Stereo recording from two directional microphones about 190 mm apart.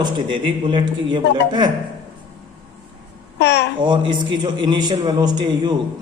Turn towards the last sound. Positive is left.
turn(degrees=-20)  # may be behind; listen again after turning